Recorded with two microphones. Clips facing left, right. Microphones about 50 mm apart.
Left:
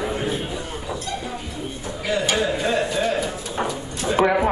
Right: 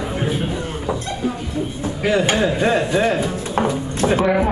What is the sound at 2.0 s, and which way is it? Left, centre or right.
Speech, right.